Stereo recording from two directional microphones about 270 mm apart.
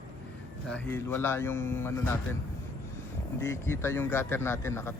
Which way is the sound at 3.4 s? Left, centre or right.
Centre.